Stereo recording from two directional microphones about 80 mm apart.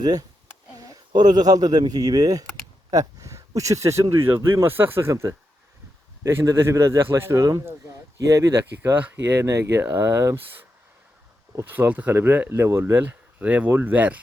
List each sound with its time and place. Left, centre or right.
0.0 s a man's voice: right
8.9 s speech: right
9.4 s a man's voice: right
11.6 s speech: right